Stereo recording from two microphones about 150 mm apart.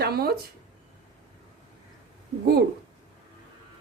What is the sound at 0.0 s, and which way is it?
Speech, 90° right.